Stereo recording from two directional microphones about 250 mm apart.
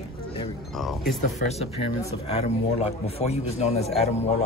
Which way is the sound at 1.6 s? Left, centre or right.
Left.